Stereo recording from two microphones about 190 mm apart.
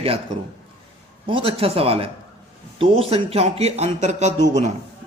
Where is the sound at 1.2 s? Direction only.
30° right (ahead or behind).